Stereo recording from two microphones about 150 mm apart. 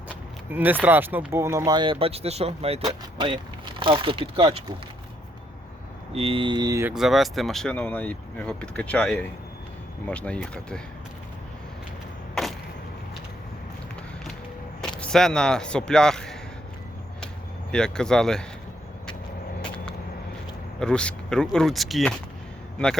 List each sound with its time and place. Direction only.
0.5 s speech: 10° right (ahead or behind); by 4.6 s 40° right (ahead or behind)
6.1 s mantra: 40° right (ahead or behind)
6.8 s speech: 5° right (ahead or behind)
12.3 s a sound: centre (ahead or behind)
15.0 s speech: 5° left (ahead or behind)
17.7 s speech: 5° left (ahead or behind)
20.7 s speech: 5° left (ahead or behind)